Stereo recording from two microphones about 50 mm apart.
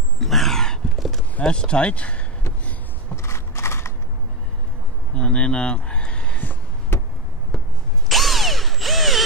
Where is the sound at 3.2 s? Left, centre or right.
Left.